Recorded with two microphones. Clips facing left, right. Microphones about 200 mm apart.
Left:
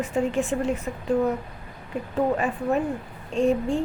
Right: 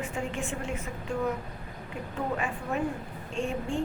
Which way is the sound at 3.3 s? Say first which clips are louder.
Left 10 dB; 40° left (ahead or behind).